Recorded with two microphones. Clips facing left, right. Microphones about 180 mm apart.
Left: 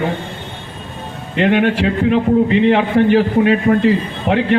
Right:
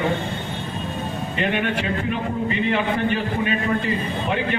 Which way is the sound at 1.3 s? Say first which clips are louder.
Left 10 dB; 75° left (ahead or behind).